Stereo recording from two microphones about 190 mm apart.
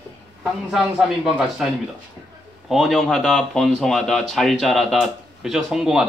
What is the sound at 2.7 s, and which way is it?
Speech, centre (ahead or behind).